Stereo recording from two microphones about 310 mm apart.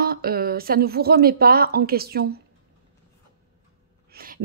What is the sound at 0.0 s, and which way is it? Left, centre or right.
A woman's voice, right.